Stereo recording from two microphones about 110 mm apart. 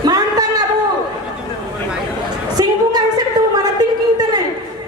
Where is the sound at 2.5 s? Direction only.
40° right (ahead or behind).